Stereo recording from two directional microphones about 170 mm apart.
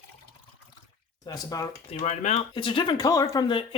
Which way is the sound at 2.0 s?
40° left (ahead or behind).